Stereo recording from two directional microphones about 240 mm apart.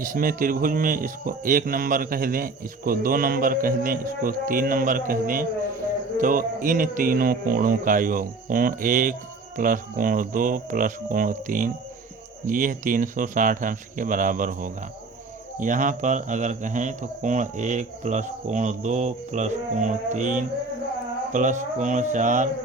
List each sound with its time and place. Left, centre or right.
0.0 s speech: right